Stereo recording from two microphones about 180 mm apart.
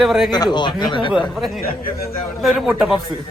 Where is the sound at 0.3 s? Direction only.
25° left (ahead or behind).